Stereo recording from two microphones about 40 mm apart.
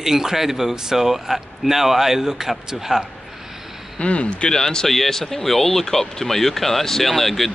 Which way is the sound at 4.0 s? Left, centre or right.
Left.